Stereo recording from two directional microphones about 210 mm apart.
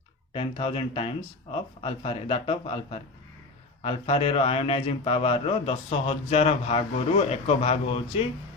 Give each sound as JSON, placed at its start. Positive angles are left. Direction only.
{"t": 0.3, "sound": "a man's voice", "side_deg": 25}